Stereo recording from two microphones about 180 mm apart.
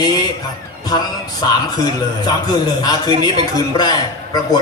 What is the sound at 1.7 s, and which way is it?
A man's voice, 20° left (ahead or behind).